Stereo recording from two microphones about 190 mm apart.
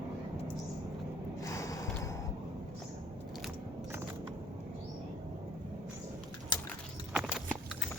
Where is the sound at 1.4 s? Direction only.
15° left (ahead or behind).